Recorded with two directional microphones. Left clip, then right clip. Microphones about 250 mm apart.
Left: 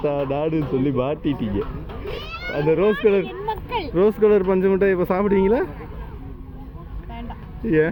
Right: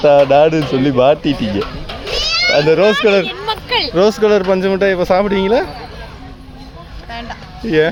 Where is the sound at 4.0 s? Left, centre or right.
Right.